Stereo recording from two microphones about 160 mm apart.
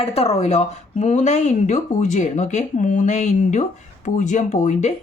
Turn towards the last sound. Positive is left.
turn(degrees=45)  # may be behind; listen again after turning